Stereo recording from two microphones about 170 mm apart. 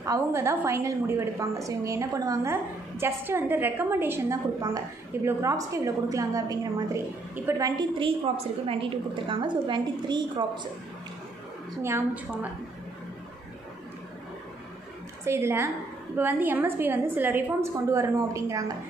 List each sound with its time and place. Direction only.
0.0 s a woman's voice: 15° right (ahead or behind)
11.8 s a woman's voice: 10° right (ahead or behind)
15.2 s a woman's voice: 15° right (ahead or behind)